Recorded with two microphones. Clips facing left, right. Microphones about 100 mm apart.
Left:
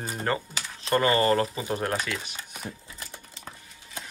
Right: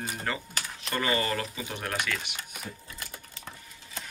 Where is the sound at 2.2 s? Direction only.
35° left (ahead or behind).